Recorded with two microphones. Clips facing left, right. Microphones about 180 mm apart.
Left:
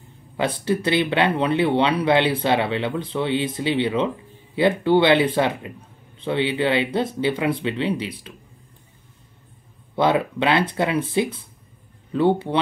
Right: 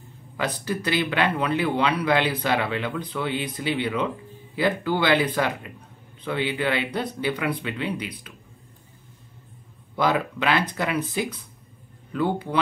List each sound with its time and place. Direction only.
0.4 s speech: 25° left (ahead or behind)
9.9 s speech: 25° left (ahead or behind)